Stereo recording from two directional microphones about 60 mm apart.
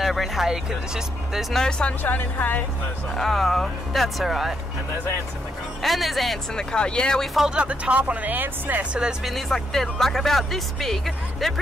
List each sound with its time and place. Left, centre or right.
0.0 s speech: centre
1.5 s speech: centre
2.0 s a woman's voice: left
3.2 s speech: centre
5.8 s speech: centre
6.5 s speech: centre
7.5 s speech: centre
9.2 s speech: centre